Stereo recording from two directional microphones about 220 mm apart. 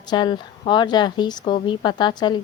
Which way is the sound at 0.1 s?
20° left (ahead or behind).